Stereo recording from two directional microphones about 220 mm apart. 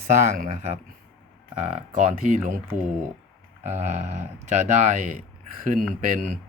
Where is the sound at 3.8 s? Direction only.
30° right (ahead or behind).